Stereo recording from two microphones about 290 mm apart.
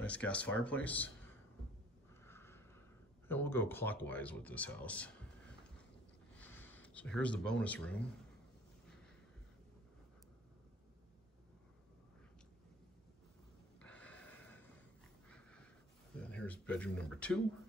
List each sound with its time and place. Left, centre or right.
0.0 s speech: centre
2.2 s a sound: centre
3.3 s speech: centre
6.3 s speech: centre
13.7 s a sound: centre
16.2 s speech: centre